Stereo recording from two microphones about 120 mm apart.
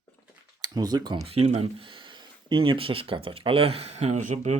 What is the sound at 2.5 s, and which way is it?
Speech, 45° right (ahead or behind).